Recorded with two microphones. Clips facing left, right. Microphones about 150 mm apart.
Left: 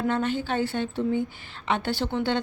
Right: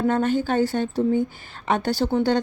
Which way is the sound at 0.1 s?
45° right (ahead or behind).